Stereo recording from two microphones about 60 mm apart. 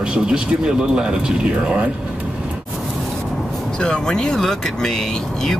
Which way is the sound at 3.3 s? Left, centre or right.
Centre.